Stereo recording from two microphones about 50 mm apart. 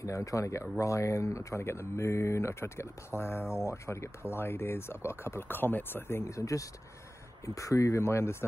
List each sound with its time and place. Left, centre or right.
0.0 s speech: left
3.5 s speech: left
6.3 s speech: left